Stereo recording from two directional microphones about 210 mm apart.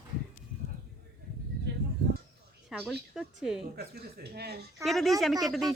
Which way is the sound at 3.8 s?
50° right (ahead or behind).